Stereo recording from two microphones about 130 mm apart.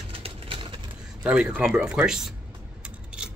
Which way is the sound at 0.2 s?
45° right (ahead or behind).